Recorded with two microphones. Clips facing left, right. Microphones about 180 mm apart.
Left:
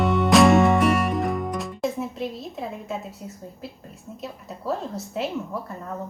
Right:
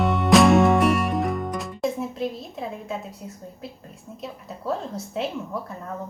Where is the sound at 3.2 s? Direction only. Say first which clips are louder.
Even; centre (ahead or behind).